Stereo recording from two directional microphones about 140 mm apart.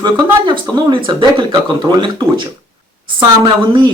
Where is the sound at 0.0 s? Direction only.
35° right (ahead or behind).